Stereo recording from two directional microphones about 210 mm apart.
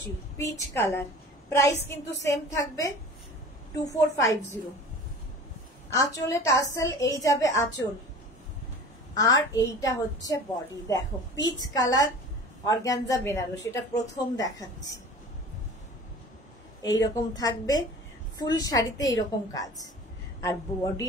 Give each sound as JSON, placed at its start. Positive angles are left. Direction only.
{"t": 0.4, "sound": "a woman's voice", "side_deg": 15}
{"t": 5.9, "sound": "a woman's voice", "side_deg": 15}
{"t": 9.1, "sound": "a woman's voice", "side_deg": 15}
{"t": 16.8, "sound": "a woman's voice", "side_deg": 15}